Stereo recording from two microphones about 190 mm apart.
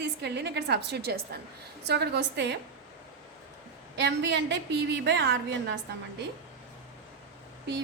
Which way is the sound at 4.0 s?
65° right (ahead or behind).